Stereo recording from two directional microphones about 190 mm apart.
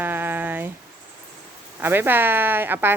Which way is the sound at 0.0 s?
10° right (ahead or behind).